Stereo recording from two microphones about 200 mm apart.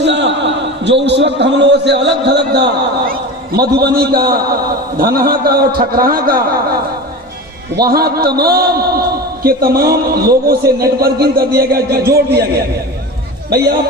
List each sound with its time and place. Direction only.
0.0 s a man's voice: 60° right (ahead or behind)
7.8 s a man's voice: 50° right (ahead or behind)